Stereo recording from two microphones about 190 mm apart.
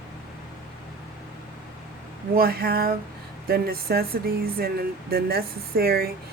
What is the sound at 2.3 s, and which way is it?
Speech, 50° right (ahead or behind).